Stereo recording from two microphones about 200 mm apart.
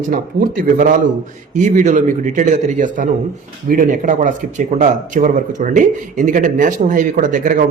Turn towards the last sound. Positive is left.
turn(degrees=-40)  # may be behind; listen again after turning